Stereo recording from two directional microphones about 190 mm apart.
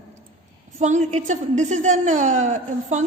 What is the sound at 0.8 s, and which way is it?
A woman's voice, 40° right (ahead or behind).